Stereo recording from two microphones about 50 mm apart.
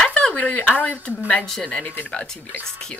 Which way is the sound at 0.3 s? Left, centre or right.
Left.